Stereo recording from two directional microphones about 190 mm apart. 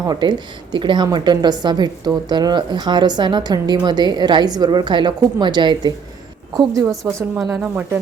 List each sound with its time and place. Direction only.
0.0 s a woman's voice: 20° right (ahead or behind)